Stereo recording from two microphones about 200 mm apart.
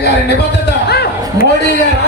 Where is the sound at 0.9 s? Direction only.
55° left (ahead or behind).